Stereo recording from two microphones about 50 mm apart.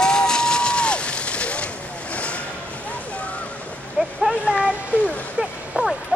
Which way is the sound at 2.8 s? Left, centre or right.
Left.